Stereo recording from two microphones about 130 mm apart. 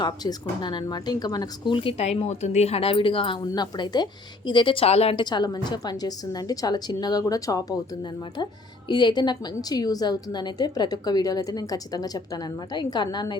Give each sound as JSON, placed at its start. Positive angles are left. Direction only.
{"t": 0.0, "sound": "a woman's voice", "side_deg": 30}
{"t": 5.2, "sound": "a woman's voice", "side_deg": 35}